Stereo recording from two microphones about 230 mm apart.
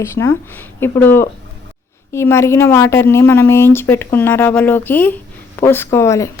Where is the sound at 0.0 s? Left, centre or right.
Centre.